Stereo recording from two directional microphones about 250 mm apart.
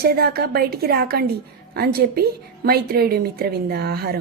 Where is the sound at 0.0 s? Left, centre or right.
Right.